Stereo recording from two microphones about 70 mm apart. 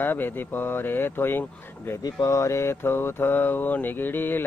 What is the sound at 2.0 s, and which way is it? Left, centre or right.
Mantra, left.